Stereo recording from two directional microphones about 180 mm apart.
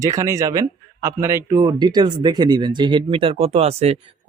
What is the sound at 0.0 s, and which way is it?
Speech, 20° right (ahead or behind).